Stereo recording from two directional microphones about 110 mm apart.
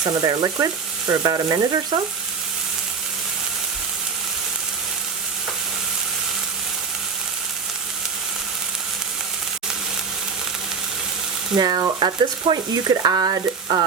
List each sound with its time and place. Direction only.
0.0 s frying: 35° right (ahead or behind)
11.5 s frying: 35° right (ahead or behind)